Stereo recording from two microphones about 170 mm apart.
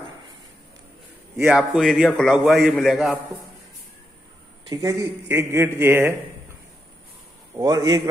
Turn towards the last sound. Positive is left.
turn(degrees=-20)  # may be behind; listen again after turning